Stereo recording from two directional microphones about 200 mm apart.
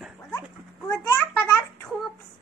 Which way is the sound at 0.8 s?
15° left (ahead or behind).